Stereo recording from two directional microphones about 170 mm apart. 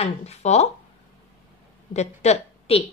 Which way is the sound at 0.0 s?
40° left (ahead or behind).